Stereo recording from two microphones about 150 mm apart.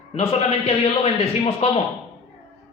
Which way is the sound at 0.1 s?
40° left (ahead or behind).